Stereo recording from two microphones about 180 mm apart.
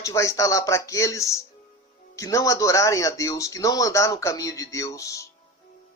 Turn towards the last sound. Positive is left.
turn(degrees=20)  # may be behind; listen again after turning